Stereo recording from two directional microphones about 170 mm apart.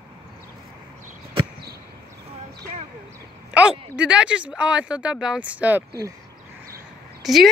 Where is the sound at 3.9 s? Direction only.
5° right (ahead or behind).